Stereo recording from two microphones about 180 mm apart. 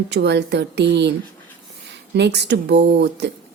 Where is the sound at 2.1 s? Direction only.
70° right (ahead or behind).